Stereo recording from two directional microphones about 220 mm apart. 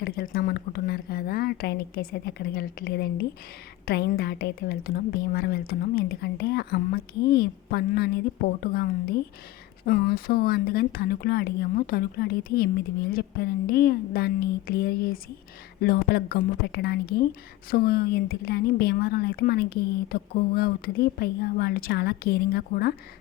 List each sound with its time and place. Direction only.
0.0 s speech: 40° left (ahead or behind)